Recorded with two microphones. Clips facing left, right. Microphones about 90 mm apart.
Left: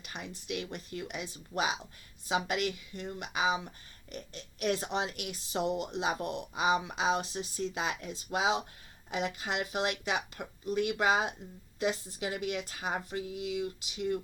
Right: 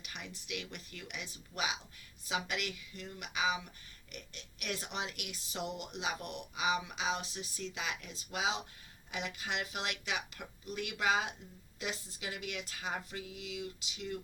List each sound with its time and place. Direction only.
0.0 s speech: 35° left (ahead or behind)